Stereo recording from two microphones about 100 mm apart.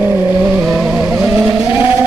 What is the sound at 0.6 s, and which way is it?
Vehicle, centre (ahead or behind).